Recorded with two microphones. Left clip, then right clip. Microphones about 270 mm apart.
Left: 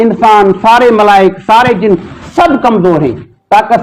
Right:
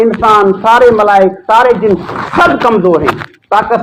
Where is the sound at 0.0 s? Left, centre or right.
Left.